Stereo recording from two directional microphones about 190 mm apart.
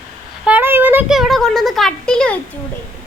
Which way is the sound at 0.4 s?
10° right (ahead or behind).